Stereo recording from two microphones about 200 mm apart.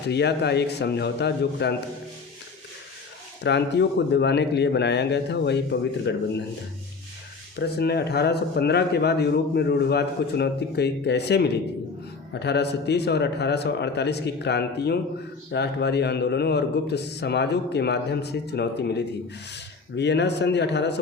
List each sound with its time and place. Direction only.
0.1 s a man's voice: 55° left (ahead or behind)
3.4 s a man's voice: 60° left (ahead or behind)
7.6 s a man's voice: 55° left (ahead or behind)